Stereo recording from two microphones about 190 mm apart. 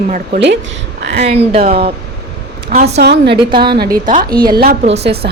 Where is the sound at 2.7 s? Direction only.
40° right (ahead or behind).